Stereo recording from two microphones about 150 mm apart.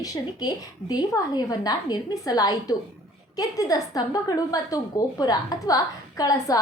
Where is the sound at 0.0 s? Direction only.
25° left (ahead or behind).